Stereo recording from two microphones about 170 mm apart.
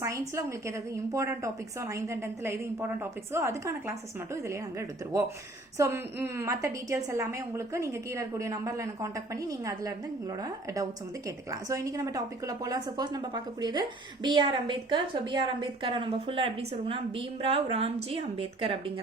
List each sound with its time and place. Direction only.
0.0 s a woman's voice: 15° right (ahead or behind)
11.7 s a woman's voice: 20° right (ahead or behind)